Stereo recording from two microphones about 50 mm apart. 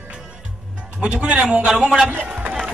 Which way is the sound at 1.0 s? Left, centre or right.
Right.